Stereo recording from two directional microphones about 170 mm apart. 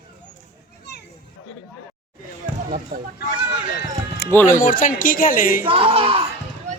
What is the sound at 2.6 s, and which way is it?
Speech, 55° right (ahead or behind).